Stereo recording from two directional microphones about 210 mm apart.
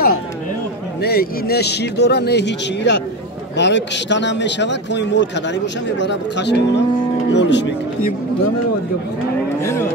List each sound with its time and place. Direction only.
1.0 s a man's voice: 50° left (ahead or behind)
9.6 s speech: 15° left (ahead or behind)